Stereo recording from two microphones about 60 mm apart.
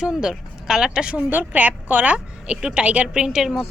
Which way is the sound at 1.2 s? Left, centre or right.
Right.